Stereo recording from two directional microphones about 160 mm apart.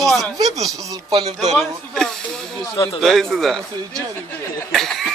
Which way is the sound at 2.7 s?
30° left (ahead or behind).